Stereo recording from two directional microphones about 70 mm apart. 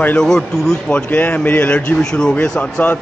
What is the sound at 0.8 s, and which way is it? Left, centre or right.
Speech, centre.